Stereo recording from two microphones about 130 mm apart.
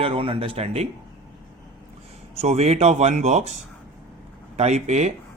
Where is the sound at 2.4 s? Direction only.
55° right (ahead or behind).